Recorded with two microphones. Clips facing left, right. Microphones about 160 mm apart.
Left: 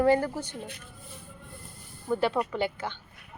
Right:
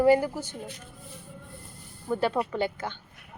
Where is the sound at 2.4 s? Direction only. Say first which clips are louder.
Even; 15° right (ahead or behind).